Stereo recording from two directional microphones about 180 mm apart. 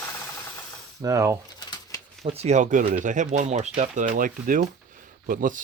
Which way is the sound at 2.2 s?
35° right (ahead or behind).